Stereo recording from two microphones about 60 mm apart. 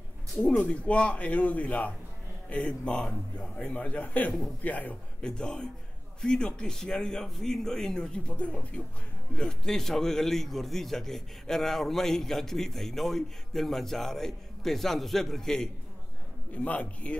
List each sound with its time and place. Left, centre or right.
0.5 s a man's voice: left
5.2 s a man's voice: centre
16.5 s speech: left